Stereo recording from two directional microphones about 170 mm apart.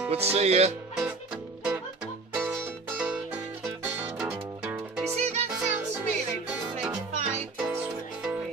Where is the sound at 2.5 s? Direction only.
5° right (ahead or behind).